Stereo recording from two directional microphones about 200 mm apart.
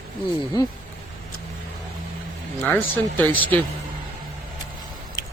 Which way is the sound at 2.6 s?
10° left (ahead or behind).